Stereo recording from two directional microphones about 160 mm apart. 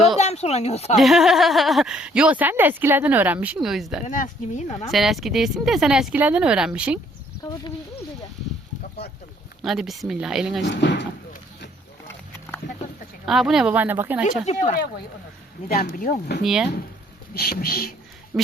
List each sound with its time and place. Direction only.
0.2 s speech: 45° left (ahead or behind)
0.9 s speech: centre (ahead or behind)
4.0 s speech: 50° left (ahead or behind)
4.9 s speech: centre (ahead or behind)
9.6 s speech: centre (ahead or behind)
10.7 s speech: 90° left
12.0 s wild animals: 15° left (ahead or behind)
13.2 s speech: centre (ahead or behind)
14.4 s speech: 50° left (ahead or behind)
15.7 s speech: 70° left (ahead or behind)
16.4 s speech: 5° right (ahead or behind)
17.3 s speech: 70° left (ahead or behind)